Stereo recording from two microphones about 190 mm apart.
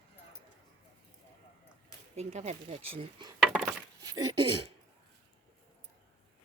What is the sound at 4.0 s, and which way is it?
Speech, 20° right (ahead or behind).